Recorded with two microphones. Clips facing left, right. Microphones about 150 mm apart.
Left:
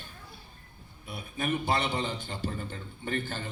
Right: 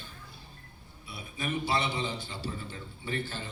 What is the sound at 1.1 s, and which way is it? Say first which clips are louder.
A man's voice: left 4 dB; 50° left (ahead or behind).